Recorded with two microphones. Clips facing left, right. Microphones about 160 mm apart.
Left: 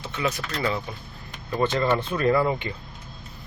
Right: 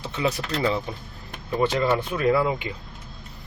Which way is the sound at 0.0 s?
30° right (ahead or behind).